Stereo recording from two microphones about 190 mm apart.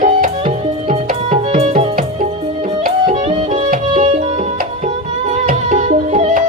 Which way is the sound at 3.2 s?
30° right (ahead or behind).